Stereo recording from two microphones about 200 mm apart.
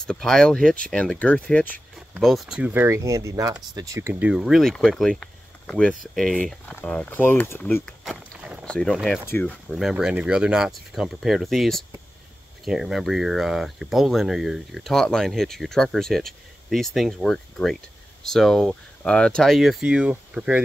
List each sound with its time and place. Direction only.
0.0 s speech: 5° left (ahead or behind)